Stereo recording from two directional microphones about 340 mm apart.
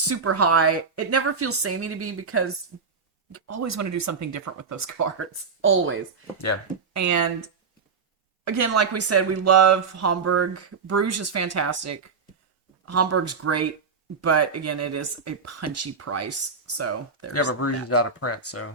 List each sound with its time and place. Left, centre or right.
0.1 s a woman's voice: right
6.9 s speech: right
8.4 s speech: right
17.3 s speech: left